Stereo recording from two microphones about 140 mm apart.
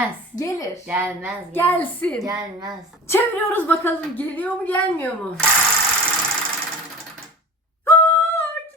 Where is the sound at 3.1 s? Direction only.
15° left (ahead or behind).